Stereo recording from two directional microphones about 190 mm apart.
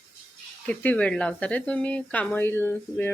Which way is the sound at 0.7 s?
10° left (ahead or behind).